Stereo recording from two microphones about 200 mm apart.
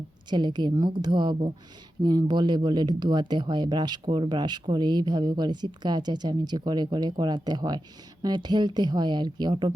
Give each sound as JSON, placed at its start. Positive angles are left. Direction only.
{"t": 0.3, "sound": "speech", "side_deg": -20}